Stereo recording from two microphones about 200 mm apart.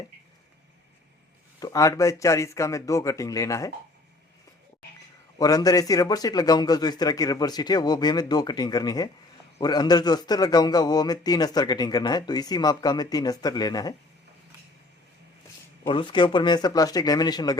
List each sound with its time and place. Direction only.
1.5 s speech: 15° left (ahead or behind)
5.4 s a man's voice: 20° left (ahead or behind)
15.9 s a man's voice: 25° left (ahead or behind)